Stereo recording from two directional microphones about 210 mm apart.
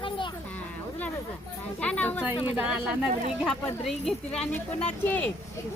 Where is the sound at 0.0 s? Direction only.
25° left (ahead or behind).